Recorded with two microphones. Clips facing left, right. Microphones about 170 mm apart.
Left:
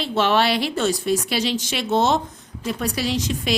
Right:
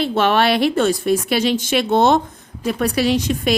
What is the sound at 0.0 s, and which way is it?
A woman's voice, 55° right (ahead or behind).